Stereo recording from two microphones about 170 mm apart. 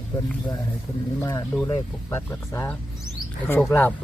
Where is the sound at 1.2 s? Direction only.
20° left (ahead or behind).